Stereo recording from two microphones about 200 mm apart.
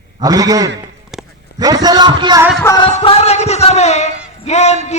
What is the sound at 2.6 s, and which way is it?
Speech, 20° left (ahead or behind).